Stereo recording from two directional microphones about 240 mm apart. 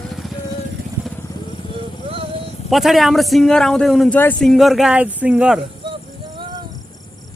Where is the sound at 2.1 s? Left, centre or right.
Right.